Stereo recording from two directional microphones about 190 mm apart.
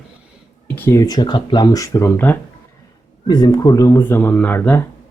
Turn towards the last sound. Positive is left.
turn(degrees=10)  # may be behind; listen again after turning